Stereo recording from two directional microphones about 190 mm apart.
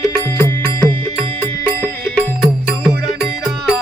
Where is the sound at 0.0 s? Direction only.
15° left (ahead or behind).